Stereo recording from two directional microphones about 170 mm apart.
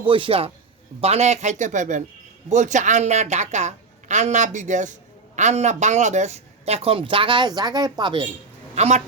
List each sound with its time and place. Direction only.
0.0 s a woman's voice: 30° right (ahead or behind)
8.7 s a woman's voice: 40° right (ahead or behind)